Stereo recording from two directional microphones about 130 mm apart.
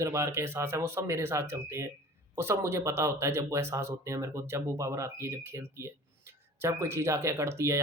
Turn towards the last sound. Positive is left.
turn(degrees=-20)  # may be behind; listen again after turning